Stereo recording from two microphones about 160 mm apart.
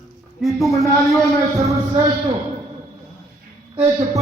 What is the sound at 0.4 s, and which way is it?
Speech, centre (ahead or behind).